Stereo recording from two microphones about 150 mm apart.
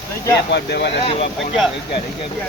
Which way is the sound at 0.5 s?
90° left.